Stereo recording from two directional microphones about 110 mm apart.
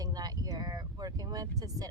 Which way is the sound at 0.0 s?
35° right (ahead or behind).